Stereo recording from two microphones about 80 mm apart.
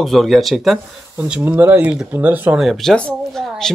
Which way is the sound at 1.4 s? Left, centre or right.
Right.